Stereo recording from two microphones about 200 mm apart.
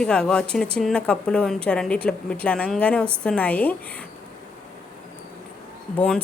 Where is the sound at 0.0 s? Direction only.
5° left (ahead or behind).